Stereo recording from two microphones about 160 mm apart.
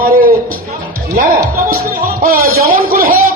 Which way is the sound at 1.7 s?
65° right (ahead or behind).